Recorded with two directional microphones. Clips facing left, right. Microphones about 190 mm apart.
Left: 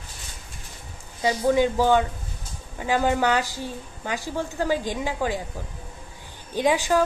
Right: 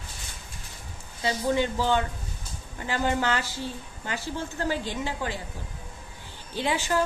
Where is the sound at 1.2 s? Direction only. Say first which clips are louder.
Left 5 dB; 15° left (ahead or behind).